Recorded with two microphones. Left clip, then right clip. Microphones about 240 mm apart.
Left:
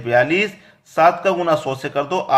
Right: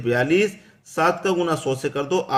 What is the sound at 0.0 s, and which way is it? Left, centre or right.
A man's voice, centre.